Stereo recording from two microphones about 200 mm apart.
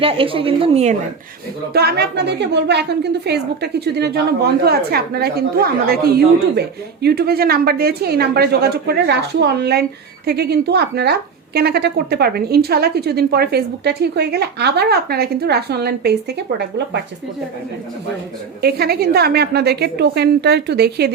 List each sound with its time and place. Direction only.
0.0 s a woman's voice: 25° right (ahead or behind)
1.7 s a woman's voice: 50° right (ahead or behind)
18.6 s a woman's voice: 50° right (ahead or behind)